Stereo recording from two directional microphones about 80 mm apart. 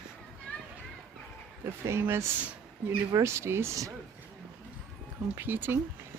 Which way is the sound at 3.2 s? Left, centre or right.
Right.